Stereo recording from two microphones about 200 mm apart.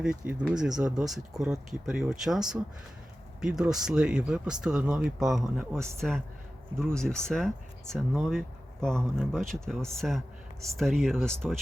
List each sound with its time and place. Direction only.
0.0 s speech: 5° right (ahead or behind)